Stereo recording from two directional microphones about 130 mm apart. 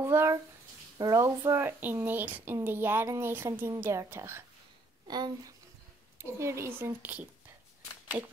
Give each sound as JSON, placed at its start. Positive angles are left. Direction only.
{"t": 0.0, "sound": "a child's voice", "side_deg": -20}
{"t": 5.0, "sound": "a woman's voice", "side_deg": -30}
{"t": 6.1, "sound": "a woman's voice", "side_deg": -20}